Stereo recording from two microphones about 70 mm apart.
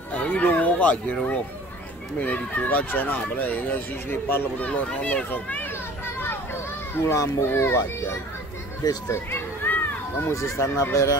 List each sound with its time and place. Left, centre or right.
0.1 s speech: left
2.1 s speech: left
7.0 s a child's voice: left
8.8 s speech: left
9.3 s a sound: left
10.2 s speech: left